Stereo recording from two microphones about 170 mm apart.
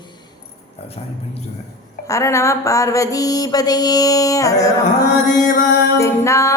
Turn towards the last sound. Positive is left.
turn(degrees=15)  # may be behind; listen again after turning